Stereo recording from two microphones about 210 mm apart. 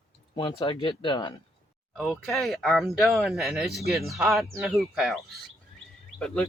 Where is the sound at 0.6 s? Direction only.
25° left (ahead or behind).